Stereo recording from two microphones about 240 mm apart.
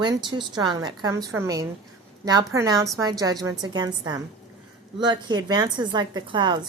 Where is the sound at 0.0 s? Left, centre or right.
Centre.